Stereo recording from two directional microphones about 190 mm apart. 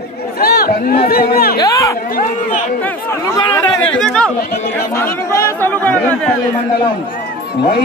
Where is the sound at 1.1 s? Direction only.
55° left (ahead or behind).